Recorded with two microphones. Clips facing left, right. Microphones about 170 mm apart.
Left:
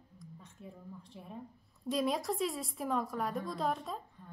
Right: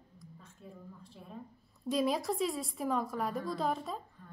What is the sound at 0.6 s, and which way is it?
Speech, 15° left (ahead or behind).